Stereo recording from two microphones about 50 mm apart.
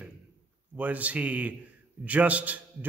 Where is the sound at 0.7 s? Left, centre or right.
Right.